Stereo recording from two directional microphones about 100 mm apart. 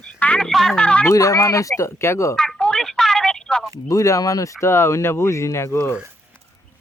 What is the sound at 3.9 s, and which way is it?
Speech, 35° left (ahead or behind).